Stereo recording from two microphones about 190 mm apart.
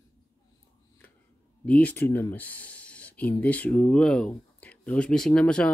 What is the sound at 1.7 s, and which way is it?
Speech, 10° left (ahead or behind).